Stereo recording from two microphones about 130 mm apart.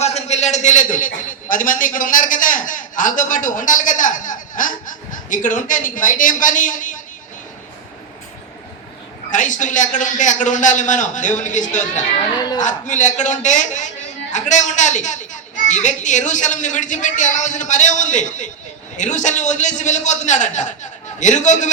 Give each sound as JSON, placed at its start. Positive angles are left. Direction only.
{"t": 0.0, "sound": "a man's voice", "side_deg": 60}
{"t": 9.3, "sound": "a woman's voice", "side_deg": 75}
{"t": 12.4, "sound": "a man's voice", "side_deg": 30}
{"t": 12.6, "sound": "a woman's voice", "side_deg": 70}